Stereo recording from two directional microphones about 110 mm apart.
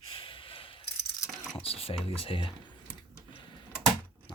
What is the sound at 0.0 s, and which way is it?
Sigh, 55° left (ahead or behind).